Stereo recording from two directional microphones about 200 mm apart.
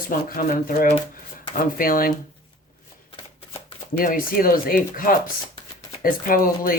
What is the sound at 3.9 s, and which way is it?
Speech, 45° left (ahead or behind).